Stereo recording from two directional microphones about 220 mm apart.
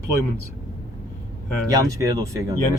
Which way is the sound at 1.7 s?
15° right (ahead or behind).